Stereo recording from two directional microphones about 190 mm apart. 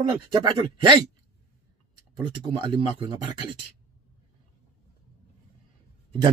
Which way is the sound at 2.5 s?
25° right (ahead or behind).